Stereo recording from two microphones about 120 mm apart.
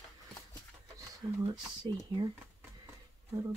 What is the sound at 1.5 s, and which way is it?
Speech, 35° right (ahead or behind).